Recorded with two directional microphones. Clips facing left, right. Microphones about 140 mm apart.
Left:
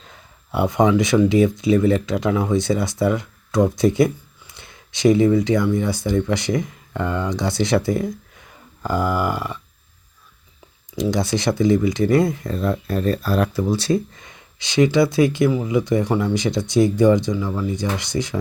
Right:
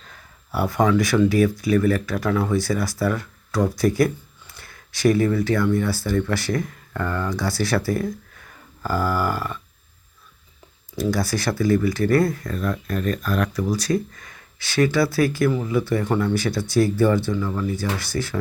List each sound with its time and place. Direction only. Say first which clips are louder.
0.1 s speech: left 2 dB; 20° left (ahead or behind)
10.9 s speech: left 2 dB; 20° left (ahead or behind)